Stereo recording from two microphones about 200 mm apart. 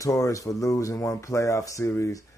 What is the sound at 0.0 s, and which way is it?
Speech, 15° left (ahead or behind).